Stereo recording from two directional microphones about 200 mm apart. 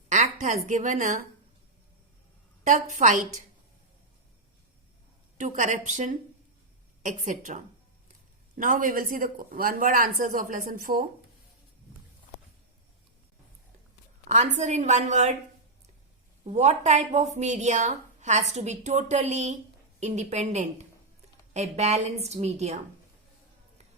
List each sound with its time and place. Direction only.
0.1 s a woman's voice: 40° right (ahead or behind)
2.6 s a woman's voice: 40° right (ahead or behind)
5.4 s a woman's voice: 40° right (ahead or behind)
14.3 s a woman's voice: 35° right (ahead or behind)
16.4 s a woman's voice: 35° right (ahead or behind)